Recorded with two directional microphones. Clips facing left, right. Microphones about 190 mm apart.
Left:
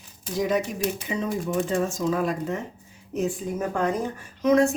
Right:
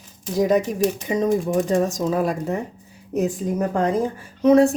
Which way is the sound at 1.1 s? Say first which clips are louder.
Right 7 dB; 40° right (ahead or behind).